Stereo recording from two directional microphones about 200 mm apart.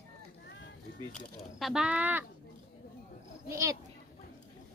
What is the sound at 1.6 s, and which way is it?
Speech, 5° right (ahead or behind).